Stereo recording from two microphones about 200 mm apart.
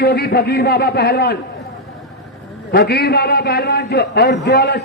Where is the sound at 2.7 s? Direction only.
55° left (ahead or behind).